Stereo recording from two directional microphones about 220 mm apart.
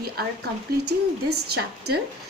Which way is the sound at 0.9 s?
90° right.